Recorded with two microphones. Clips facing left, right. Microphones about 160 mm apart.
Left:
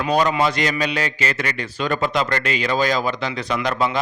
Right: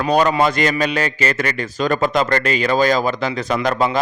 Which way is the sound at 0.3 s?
50° right (ahead or behind).